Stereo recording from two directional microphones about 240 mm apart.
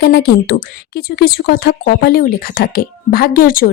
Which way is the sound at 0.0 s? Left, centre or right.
Left.